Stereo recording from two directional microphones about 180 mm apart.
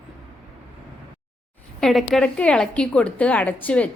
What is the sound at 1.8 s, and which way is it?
A woman's voice, centre (ahead or behind).